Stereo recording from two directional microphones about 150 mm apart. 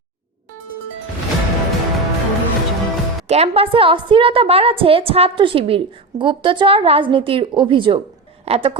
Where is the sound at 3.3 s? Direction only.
40° right (ahead or behind).